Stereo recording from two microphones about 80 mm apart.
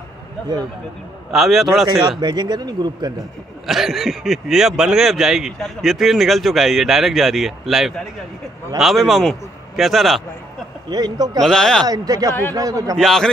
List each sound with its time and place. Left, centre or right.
1.3 s speech: centre
1.9 s a man's voice: right
3.6 s speech: centre
10.9 s a man's voice: right
11.4 s speech: centre
11.8 s speech: right
12.9 s speech: centre